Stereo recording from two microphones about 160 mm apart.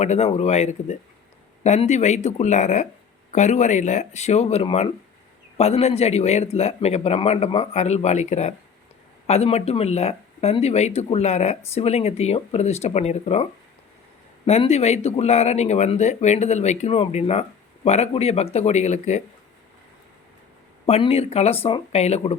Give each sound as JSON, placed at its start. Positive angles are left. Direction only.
{"t": 0.0, "sound": "a man's voice", "side_deg": 40}
{"t": 20.8, "sound": "a man's voice", "side_deg": 40}